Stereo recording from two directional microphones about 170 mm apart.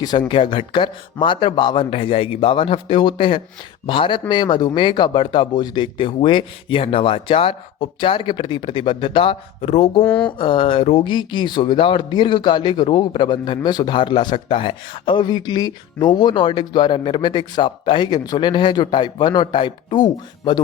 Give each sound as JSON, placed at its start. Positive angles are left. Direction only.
{"t": 0.0, "sound": "speech", "side_deg": 25}
{"t": 10.0, "sound": "speech", "side_deg": 10}
{"t": 10.2, "sound": "speech", "side_deg": 30}